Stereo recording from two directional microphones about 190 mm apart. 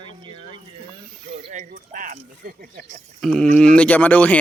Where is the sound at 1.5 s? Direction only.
40° right (ahead or behind).